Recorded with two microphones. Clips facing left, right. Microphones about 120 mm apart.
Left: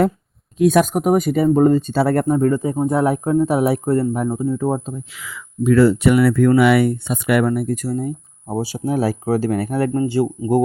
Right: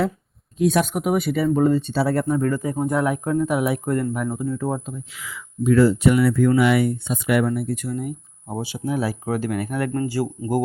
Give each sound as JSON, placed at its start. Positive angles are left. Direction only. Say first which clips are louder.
{"t": 0.6, "sound": "speech", "louder": "left 5 dB", "side_deg": 50}
{"t": 2.2, "sound": "speech", "louder": "left 5 dB", "side_deg": 35}
{"t": 2.5, "sound": "speech", "louder": "left 4 dB", "side_deg": 25}
{"t": 5.6, "sound": "speech", "louder": "left 3 dB", "side_deg": 75}